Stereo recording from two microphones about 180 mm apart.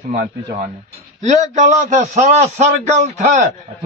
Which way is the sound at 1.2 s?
40° right (ahead or behind).